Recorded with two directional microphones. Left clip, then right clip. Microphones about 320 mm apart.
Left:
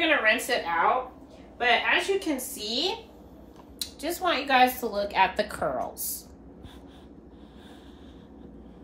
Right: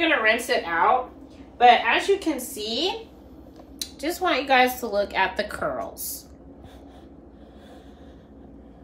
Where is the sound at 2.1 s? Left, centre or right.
Centre.